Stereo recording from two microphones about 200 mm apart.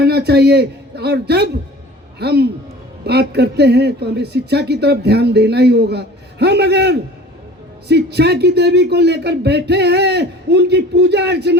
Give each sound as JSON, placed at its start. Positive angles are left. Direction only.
{"t": 0.0, "sound": "a man's voice", "side_deg": -55}